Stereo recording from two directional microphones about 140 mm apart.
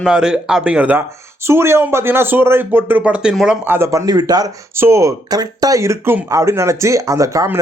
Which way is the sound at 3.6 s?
15° right (ahead or behind).